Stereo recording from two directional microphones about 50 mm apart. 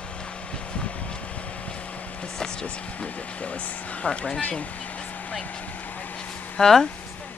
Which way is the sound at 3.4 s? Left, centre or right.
Left.